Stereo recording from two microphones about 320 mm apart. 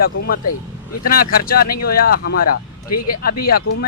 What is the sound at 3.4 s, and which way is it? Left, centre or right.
Speech, left.